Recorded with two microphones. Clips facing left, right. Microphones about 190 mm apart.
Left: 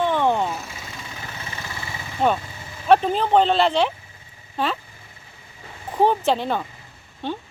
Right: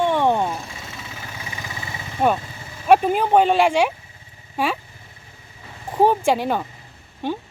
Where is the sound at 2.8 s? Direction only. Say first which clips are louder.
Right 1 dB; 10° right (ahead or behind).